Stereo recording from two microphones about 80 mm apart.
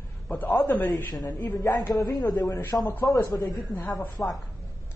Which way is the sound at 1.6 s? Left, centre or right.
Left.